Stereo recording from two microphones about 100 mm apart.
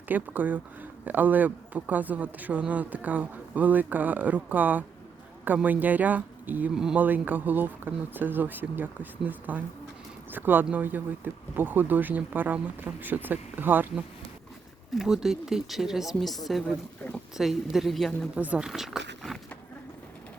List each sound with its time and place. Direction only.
0.1 s speech: 15° right (ahead or behind)
6.7 s speech: 5° right (ahead or behind)
7.0 s speech: 20° right (ahead or behind)
14.9 s speech: 5° right (ahead or behind)
18.3 s speech: 15° right (ahead or behind)